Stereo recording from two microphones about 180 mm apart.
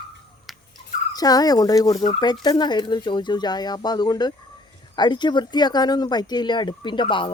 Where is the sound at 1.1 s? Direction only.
20° left (ahead or behind).